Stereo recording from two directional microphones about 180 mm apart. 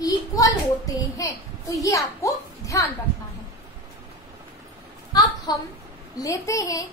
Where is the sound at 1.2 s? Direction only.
20° left (ahead or behind).